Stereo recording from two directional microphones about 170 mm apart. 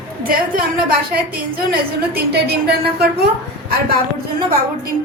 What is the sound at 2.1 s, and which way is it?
A woman's voice, 70° right (ahead or behind).